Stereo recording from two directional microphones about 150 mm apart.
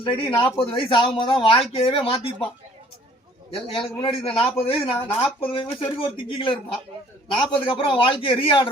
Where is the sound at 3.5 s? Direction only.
35° left (ahead or behind).